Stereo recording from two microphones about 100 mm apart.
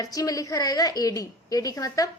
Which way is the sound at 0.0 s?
35° left (ahead or behind).